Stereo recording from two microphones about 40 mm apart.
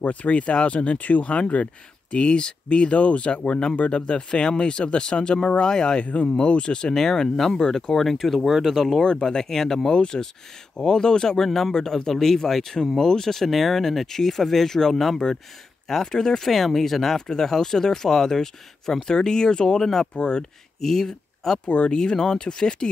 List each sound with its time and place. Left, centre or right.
0.0 s speech: left
2.0 s speech: left; by 8.5 s centre
8.5 s speech: centre
8.7 s speech: centre
9.0 s speech: centre
9.8 s speech: centre
17.3 s speech: centre
19.8 s speech: centre
20.2 s speech: left
20.8 s speech: centre
21.6 s speech: left
21.9 s speech: centre